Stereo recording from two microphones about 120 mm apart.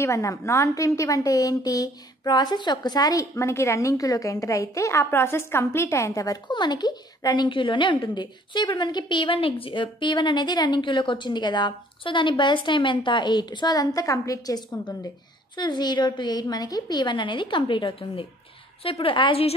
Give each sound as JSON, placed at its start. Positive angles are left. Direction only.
{"t": 0.0, "sound": "a woman's voice", "side_deg": 25}